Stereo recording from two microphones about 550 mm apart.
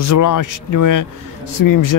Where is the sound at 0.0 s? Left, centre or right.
Left.